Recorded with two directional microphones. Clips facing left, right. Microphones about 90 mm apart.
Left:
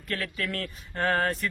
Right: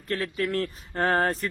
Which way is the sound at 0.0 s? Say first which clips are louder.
Right 4 dB; 30° right (ahead or behind).